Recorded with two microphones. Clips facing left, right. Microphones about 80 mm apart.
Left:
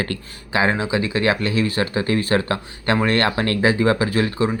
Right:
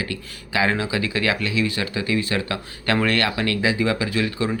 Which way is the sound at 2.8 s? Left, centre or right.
Left.